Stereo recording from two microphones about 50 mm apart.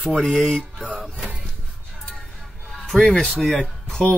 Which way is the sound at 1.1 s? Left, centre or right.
Right.